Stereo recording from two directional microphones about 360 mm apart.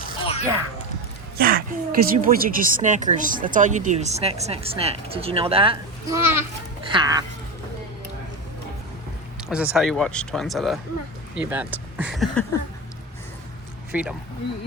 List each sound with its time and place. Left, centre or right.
0.0 s a sound: centre
1.4 s speech: right
9.5 s speech: centre
13.9 s speech: centre